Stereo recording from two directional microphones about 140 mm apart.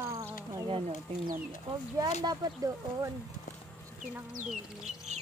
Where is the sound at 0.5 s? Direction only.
35° right (ahead or behind).